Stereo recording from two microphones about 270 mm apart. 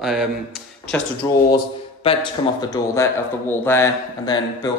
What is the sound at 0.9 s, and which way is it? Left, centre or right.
A man's voice, centre.